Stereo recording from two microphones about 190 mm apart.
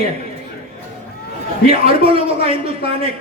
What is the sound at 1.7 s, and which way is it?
Speech, 30° right (ahead or behind).